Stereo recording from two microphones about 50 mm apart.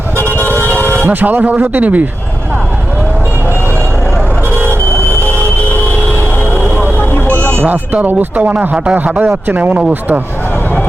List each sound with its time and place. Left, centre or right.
0.2 s vehicle: left
1.0 s speech: right
7.0 s vehicle: left
7.7 s speech: right